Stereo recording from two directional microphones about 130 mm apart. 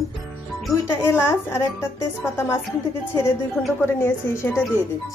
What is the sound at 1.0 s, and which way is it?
Speech, 20° left (ahead or behind).